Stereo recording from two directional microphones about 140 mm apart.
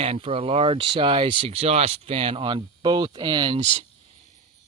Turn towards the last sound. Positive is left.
turn(degrees=-55)  # may be behind; listen again after turning